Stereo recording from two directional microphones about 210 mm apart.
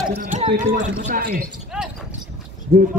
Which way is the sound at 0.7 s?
40° right (ahead or behind).